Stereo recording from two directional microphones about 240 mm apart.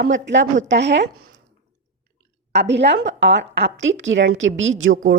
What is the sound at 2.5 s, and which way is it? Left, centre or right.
A woman's voice, right.